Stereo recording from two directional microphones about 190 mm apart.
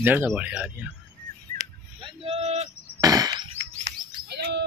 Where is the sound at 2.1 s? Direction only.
30° right (ahead or behind).